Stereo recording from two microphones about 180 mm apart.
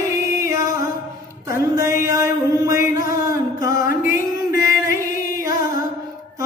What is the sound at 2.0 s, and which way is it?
Chant, 15° right (ahead or behind).